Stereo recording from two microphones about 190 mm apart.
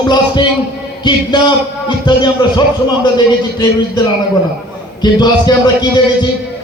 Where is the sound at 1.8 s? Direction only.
25° left (ahead or behind).